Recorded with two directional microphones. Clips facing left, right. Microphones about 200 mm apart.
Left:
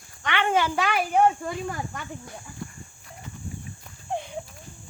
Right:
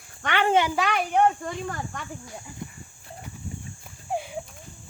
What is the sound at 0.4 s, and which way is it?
Speech, 25° right (ahead or behind).